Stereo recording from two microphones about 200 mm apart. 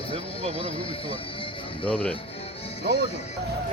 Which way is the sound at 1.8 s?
5° left (ahead or behind).